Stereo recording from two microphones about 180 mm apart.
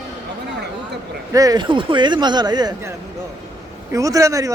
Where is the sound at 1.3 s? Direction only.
20° right (ahead or behind).